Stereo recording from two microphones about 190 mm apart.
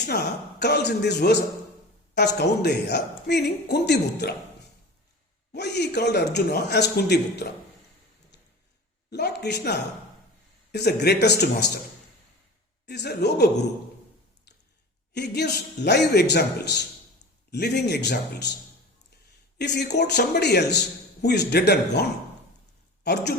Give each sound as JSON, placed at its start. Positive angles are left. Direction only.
{"t": 0.1, "sound": "a man's voice", "side_deg": 60}
{"t": 5.5, "sound": "a man's voice", "side_deg": 60}
{"t": 9.0, "sound": "a man's voice", "side_deg": 60}
{"t": 12.8, "sound": "a man's voice", "side_deg": 60}
{"t": 15.1, "sound": "a man's voice", "side_deg": 60}
{"t": 19.5, "sound": "a man's voice", "side_deg": 60}
{"t": 23.0, "sound": "a man's voice", "side_deg": 60}